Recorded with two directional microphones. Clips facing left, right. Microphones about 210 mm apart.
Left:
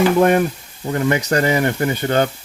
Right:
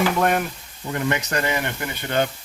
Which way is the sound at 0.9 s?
35° left (ahead or behind).